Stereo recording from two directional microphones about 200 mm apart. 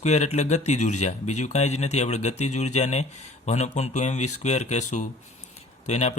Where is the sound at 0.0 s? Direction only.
35° left (ahead or behind).